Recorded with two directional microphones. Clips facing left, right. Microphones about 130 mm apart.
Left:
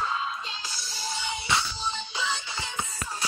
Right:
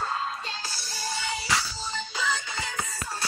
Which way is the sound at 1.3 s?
90° right.